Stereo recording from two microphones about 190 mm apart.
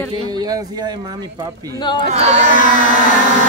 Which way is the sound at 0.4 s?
20° right (ahead or behind).